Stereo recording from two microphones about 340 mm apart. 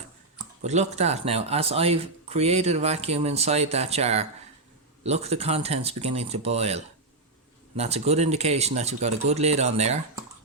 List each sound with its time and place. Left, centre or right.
0.6 s speech: centre